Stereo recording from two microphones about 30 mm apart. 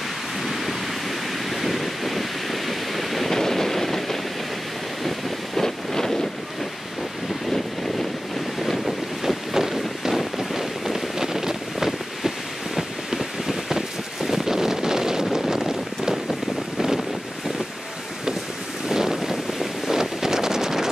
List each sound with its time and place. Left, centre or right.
1.5 s waves: centre
3.3 s a sound: centre
5.6 s wind noise: centre
9.2 s run: centre
12.7 s a sound: centre
14.2 s wind noise: centre
15.3 s a sound: centre
16.3 s wind noise: centre
18.9 s wind noise: centre